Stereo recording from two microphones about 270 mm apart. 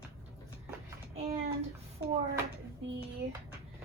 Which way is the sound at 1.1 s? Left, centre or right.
Right.